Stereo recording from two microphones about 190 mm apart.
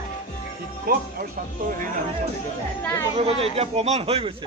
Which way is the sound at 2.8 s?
10° left (ahead or behind).